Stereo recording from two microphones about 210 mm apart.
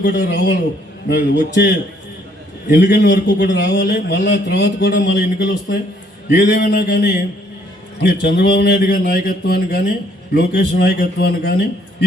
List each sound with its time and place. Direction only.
0.0 s speech: 55° left (ahead or behind)